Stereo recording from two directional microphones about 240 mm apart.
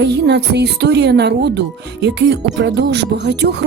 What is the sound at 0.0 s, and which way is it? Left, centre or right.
Speech, right.